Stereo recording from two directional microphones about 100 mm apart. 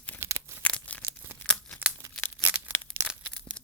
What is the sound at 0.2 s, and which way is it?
Tearing, 30° right (ahead or behind).